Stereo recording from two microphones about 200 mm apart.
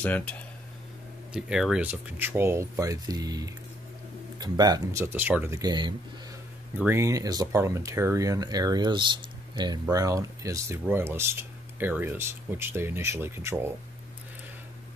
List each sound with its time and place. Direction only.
0.0 s speech: 5° left (ahead or behind); by 13.7 s 10° right (ahead or behind)